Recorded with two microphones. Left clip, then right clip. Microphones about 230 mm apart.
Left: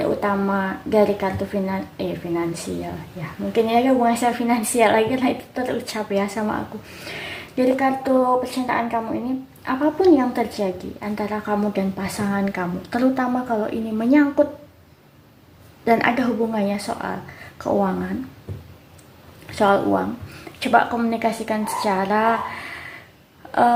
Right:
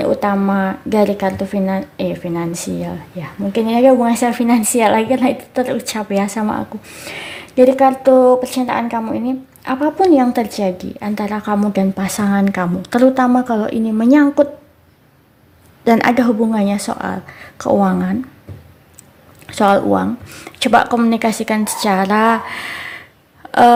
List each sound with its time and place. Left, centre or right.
0.0 s speech: right
15.8 s speech: right
19.5 s speech: right
23.5 s a sound: right